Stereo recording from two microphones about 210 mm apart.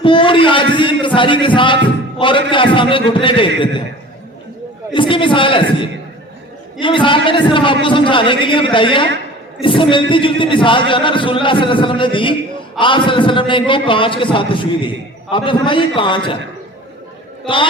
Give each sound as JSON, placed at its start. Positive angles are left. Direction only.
{"t": 0.0, "sound": "a man's voice", "side_deg": 25}
{"t": 4.9, "sound": "a man's voice", "side_deg": 25}
{"t": 6.7, "sound": "a man's voice", "side_deg": 25}
{"t": 17.4, "sound": "a man's voice", "side_deg": 25}